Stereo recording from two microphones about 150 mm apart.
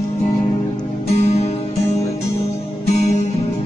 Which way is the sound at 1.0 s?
45° left (ahead or behind).